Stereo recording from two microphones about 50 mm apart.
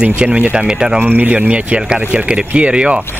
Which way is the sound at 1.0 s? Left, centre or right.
Right.